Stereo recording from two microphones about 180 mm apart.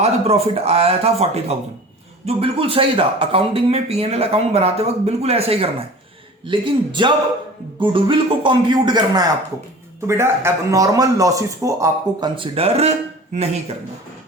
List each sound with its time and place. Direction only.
0.0 s speech: 35° right (ahead or behind)